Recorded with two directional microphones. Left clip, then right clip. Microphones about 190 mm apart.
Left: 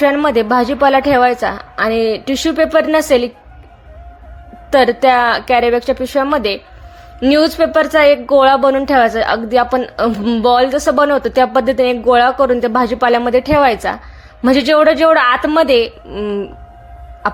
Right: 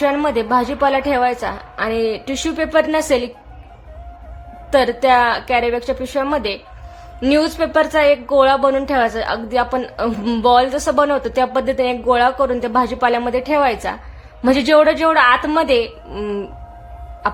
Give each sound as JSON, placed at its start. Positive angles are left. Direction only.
{"t": 0.0, "sound": "a woman's voice", "side_deg": 20}
{"t": 4.7, "sound": "a woman's voice", "side_deg": 20}